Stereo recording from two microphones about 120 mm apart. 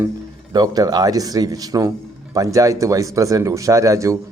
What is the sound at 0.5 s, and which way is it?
Speech, 30° right (ahead or behind).